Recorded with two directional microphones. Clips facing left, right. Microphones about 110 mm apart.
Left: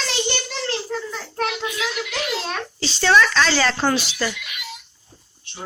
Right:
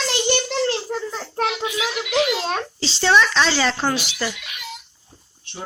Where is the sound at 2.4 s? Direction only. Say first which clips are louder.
Right 3 dB; 30° right (ahead or behind); by 4.3 s 15° right (ahead or behind).